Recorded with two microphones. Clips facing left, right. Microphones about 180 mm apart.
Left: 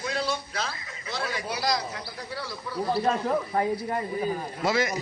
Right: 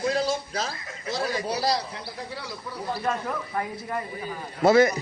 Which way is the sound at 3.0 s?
30° left (ahead or behind).